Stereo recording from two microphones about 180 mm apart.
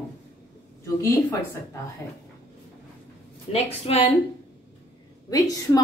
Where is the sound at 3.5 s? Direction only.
35° left (ahead or behind).